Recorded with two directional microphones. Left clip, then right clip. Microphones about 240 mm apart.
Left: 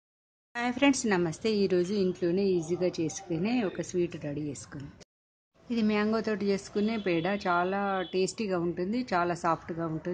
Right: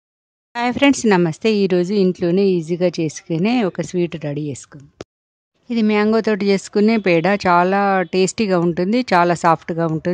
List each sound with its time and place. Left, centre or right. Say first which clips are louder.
0.5 s speech: right 11 dB; right
5.7 s speech: right 12 dB; right